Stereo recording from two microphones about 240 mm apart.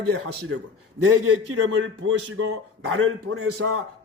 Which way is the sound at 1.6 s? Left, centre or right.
Right.